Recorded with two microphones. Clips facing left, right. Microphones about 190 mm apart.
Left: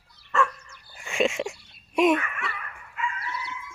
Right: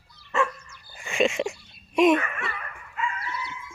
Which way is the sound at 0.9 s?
Centre (ahead or behind).